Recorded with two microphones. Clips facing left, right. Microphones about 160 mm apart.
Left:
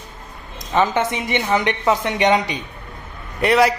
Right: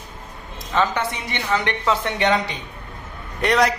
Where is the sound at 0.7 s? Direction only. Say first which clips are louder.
Left 3 dB; 20° left (ahead or behind).